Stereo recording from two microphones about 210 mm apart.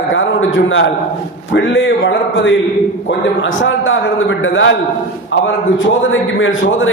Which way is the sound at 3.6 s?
65° left (ahead or behind).